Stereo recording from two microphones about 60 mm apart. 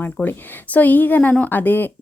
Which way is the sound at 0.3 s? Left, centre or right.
Left.